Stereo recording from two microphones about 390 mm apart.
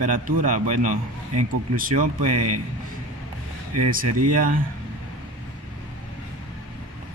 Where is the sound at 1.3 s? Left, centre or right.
Right.